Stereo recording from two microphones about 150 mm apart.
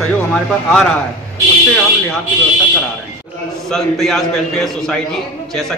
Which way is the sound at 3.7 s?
Centre (ahead or behind).